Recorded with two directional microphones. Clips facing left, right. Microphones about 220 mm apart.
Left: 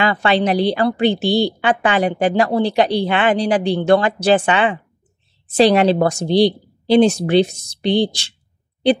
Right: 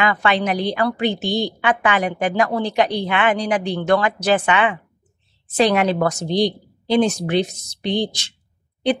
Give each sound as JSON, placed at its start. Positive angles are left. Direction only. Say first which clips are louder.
{"t": 0.0, "sound": "a woman's voice", "louder": "left 3 dB", "side_deg": 30}